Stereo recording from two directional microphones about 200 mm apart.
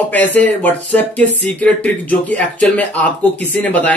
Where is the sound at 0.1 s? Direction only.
10° left (ahead or behind).